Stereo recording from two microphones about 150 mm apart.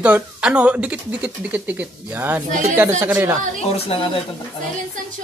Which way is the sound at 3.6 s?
45° left (ahead or behind).